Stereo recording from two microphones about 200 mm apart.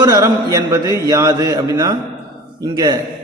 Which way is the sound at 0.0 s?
20° right (ahead or behind).